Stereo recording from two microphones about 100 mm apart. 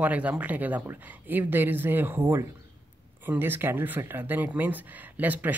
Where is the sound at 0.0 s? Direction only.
15° right (ahead or behind).